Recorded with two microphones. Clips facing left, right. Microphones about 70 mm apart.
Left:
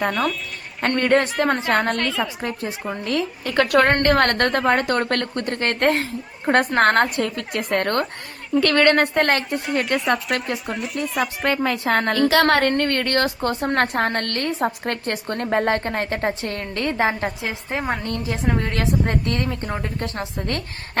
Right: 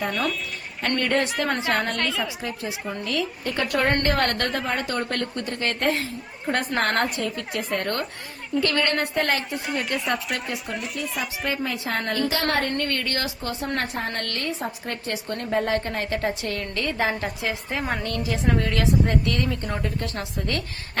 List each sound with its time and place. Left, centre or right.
0.1 s speech: centre
0.8 s a woman's voice: left
2.0 s speech: centre
2.4 s a woman's voice: left
3.4 s a woman's voice: left
4.0 s a woman's voice: left
8.6 s a woman's voice: left
10.7 s speech: centre
11.4 s a woman's voice: left
12.3 s a woman's voice: left
12.7 s a woman's voice: left
14.1 s a woman's voice: left